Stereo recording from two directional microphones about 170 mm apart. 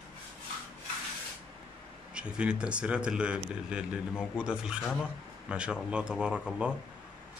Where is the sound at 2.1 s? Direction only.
5° right (ahead or behind).